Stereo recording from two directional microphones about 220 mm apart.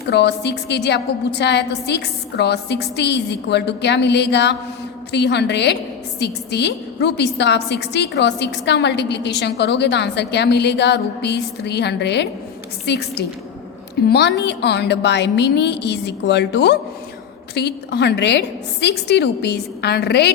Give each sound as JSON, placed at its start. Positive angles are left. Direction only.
{"t": 0.1, "sound": "a woman's voice", "side_deg": 50}